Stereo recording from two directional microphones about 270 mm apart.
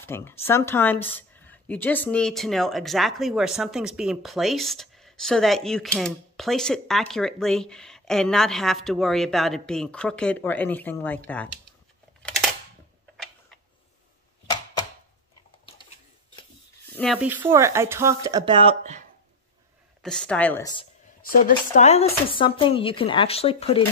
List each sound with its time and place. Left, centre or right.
0.0 s speech: centre
12.2 s scissors: centre
16.9 s speech: centre; by 19.0 s right
20.0 s speech: centre
21.5 s speech: left